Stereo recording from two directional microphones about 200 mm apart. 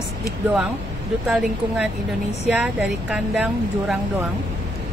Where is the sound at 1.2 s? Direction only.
5° right (ahead or behind).